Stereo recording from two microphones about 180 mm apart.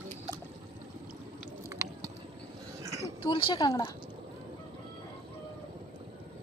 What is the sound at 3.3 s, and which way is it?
Speech, 30° left (ahead or behind).